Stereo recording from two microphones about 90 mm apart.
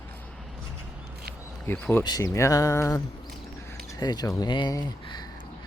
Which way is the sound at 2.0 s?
45° left (ahead or behind).